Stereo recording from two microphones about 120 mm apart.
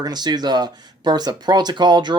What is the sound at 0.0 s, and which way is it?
Speech, 35° right (ahead or behind).